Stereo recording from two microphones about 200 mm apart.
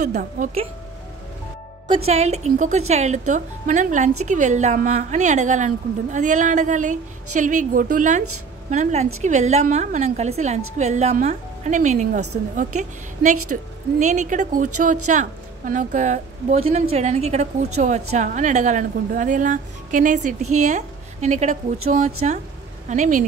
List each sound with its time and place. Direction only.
0.0 s a woman's voice: 40° right (ahead or behind)
1.9 s a woman's voice: 30° right (ahead or behind)